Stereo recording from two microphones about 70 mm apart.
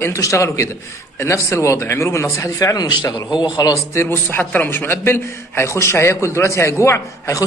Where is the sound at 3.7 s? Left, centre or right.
Left.